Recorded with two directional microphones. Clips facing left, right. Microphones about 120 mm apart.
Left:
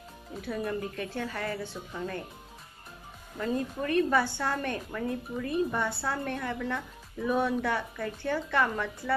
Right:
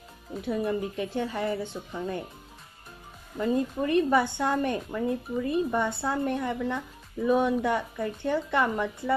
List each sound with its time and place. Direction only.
0.4 s a woman's voice: 20° right (ahead or behind)
3.3 s a woman's voice: 20° right (ahead or behind)